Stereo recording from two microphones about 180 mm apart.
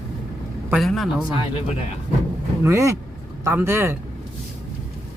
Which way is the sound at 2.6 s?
15° right (ahead or behind).